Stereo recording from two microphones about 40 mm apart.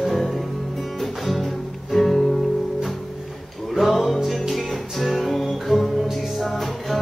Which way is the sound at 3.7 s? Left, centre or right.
Centre.